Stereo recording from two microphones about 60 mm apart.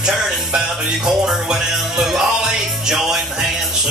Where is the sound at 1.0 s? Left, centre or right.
Centre.